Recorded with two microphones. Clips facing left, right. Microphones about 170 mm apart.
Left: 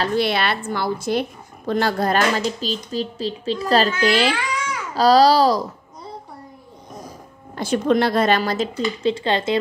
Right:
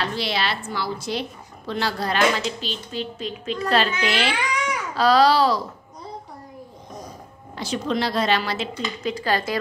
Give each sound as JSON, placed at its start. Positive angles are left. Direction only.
{"t": 0.0, "sound": "speech", "side_deg": 55}
{"t": 7.5, "sound": "speech", "side_deg": 55}